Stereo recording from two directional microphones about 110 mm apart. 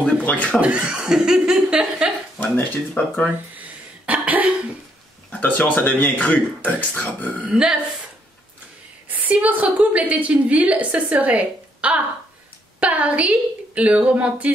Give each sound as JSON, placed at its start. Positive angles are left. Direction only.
{"t": 0.0, "sound": "a sound", "side_deg": 10}
{"t": 0.6, "sound": "a woman's voice", "side_deg": -10}
{"t": 2.4, "sound": "speech", "side_deg": 15}
{"t": 3.5, "sound": "cough", "side_deg": -15}
{"t": 5.3, "sound": "speech", "side_deg": 15}
{"t": 7.4, "sound": "a woman's voice", "side_deg": -5}
{"t": 9.1, "sound": "a woman's voice", "side_deg": -15}